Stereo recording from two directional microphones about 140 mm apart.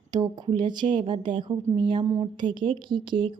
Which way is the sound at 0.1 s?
30° right (ahead or behind).